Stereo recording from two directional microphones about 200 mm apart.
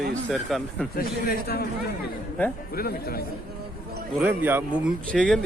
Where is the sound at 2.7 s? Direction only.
50° left (ahead or behind).